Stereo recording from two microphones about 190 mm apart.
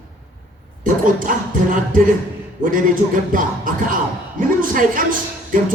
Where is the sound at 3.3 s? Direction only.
45° right (ahead or behind).